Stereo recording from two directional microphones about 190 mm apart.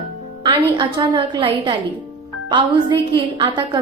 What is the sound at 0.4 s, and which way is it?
A woman's voice, 25° right (ahead or behind).